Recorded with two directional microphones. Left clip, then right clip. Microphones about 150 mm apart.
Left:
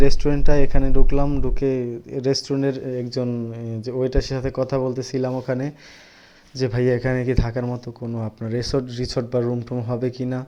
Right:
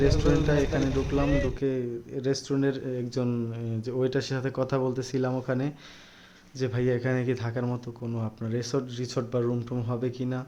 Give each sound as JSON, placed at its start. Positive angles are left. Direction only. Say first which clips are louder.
{"t": 0.0, "sound": "speech", "louder": "left 3 dB", "side_deg": 25}
{"t": 6.6, "sound": "speech", "louder": "left 7 dB", "side_deg": 35}
{"t": 7.6, "sound": "speech", "louder": "left 5 dB", "side_deg": 15}
{"t": 8.4, "sound": "speech", "louder": "left 7 dB", "side_deg": 30}